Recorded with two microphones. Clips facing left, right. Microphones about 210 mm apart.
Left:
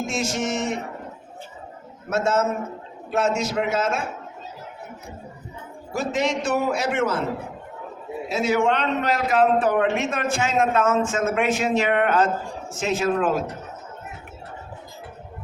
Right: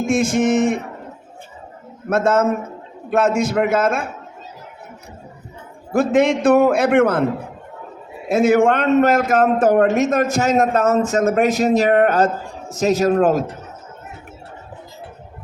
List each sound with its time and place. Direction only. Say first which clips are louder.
0.0 s a sound: right 9 dB; 55° right (ahead or behind)
2.0 s a man's voice: right 5 dB; 55° right (ahead or behind)
5.9 s a man's voice: right 9 dB; 55° right (ahead or behind)
8.3 s a man's voice: right 7 dB; 50° right (ahead or behind)